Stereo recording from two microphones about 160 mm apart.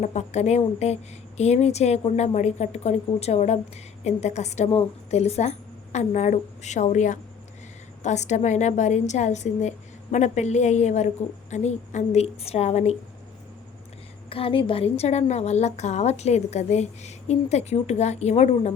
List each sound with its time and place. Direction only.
0.0 s a woman's voice: 45° left (ahead or behind)
14.3 s a woman's voice: 35° left (ahead or behind)